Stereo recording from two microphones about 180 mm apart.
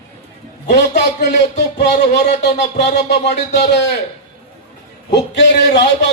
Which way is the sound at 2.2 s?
70° left (ahead or behind).